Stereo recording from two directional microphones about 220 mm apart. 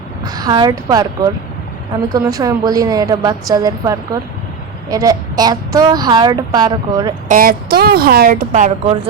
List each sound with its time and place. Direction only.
0.3 s a woman's voice: 20° right (ahead or behind)
7.3 s speech: 40° right (ahead or behind)